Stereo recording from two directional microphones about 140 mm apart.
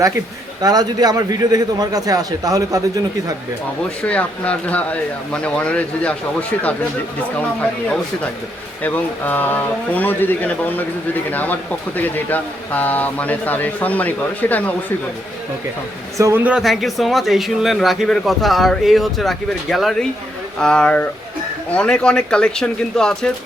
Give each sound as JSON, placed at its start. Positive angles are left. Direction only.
{"t": 0.6, "sound": "a man's voice", "side_deg": -30}
{"t": 4.0, "sound": "speech", "side_deg": 10}
{"t": 7.6, "sound": "speech", "side_deg": 10}
{"t": 16.1, "sound": "a man's voice", "side_deg": -20}
{"t": 16.4, "sound": "speech", "side_deg": -5}